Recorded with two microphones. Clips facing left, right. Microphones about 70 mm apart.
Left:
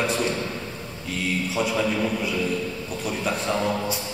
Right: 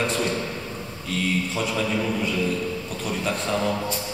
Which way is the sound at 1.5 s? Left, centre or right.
Centre.